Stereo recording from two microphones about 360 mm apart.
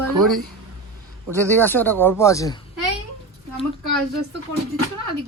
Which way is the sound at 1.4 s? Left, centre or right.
Centre.